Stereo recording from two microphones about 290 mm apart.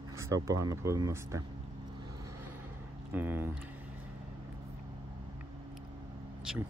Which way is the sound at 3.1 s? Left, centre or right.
Centre.